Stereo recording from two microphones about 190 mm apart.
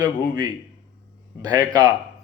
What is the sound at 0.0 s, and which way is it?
A man's voice, 20° right (ahead or behind).